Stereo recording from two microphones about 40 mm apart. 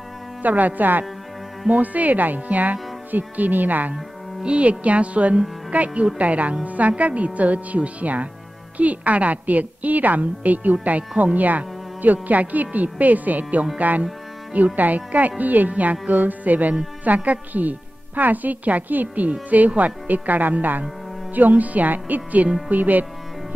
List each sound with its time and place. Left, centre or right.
0.4 s speech: right
4.4 s a woman's voice: right